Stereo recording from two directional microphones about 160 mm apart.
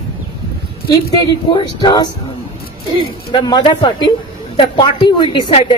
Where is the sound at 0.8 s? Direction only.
30° left (ahead or behind).